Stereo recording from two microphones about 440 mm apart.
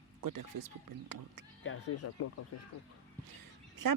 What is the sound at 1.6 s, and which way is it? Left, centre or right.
Speech, left.